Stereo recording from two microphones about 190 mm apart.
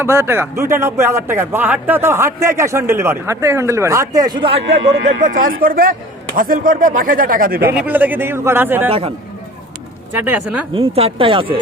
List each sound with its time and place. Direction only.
0.0 s speech: 15° right (ahead or behind)
5.2 s a man's voice: 45° right (ahead or behind)
7.7 s speech: 10° right (ahead or behind)
8.9 s speech: 30° right (ahead or behind)
10.1 s speech: 10° right (ahead or behind)
10.8 s speech: 30° right (ahead or behind)